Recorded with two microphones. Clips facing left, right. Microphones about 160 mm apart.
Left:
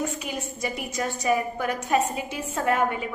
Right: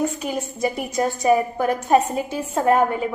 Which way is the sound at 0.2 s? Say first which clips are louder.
Right 7 dB; 40° right (ahead or behind).